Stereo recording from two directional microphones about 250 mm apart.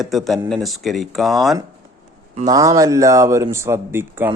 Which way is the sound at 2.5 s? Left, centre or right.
Centre.